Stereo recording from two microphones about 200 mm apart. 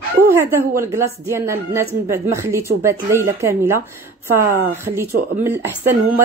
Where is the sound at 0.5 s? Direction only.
15° right (ahead or behind).